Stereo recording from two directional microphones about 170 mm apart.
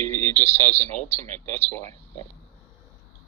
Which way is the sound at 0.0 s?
10° left (ahead or behind).